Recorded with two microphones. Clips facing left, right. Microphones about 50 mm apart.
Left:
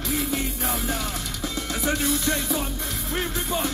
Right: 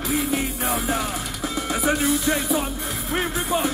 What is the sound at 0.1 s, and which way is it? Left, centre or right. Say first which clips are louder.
Music: right 3 dB; centre.